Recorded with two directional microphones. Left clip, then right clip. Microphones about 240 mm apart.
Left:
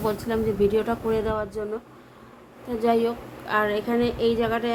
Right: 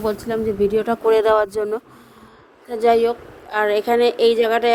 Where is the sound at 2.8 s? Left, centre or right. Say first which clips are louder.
Right 7 dB; right.